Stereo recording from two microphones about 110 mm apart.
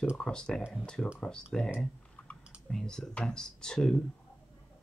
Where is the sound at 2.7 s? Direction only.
5° left (ahead or behind).